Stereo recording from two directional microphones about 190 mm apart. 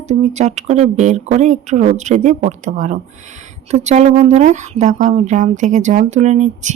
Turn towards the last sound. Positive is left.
turn(degrees=-35)  # may be behind; listen again after turning